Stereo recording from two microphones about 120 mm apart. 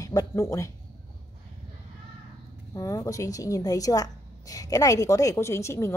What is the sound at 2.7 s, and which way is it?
A woman's voice, 25° left (ahead or behind).